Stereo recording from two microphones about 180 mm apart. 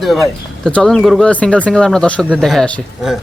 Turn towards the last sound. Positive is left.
turn(degrees=0)  # may be behind; listen again after turning